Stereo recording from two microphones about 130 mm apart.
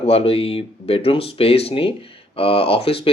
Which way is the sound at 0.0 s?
50° left (ahead or behind).